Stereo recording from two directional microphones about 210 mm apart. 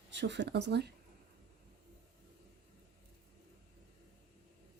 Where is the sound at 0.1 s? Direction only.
55° right (ahead or behind).